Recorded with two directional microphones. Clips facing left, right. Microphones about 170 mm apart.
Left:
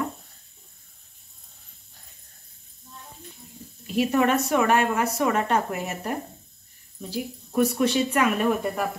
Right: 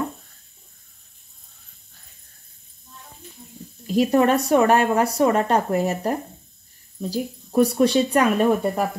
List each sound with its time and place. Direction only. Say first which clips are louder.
3.8 s speech: right 4 dB; 40° right (ahead or behind)